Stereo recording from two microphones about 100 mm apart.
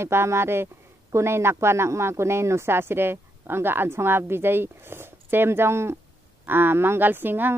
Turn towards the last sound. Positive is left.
turn(degrees=-20)  # may be behind; listen again after turning